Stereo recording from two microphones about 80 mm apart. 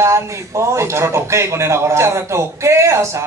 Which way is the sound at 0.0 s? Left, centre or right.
Right.